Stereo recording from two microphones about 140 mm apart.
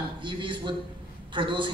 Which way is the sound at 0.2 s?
35° right (ahead or behind).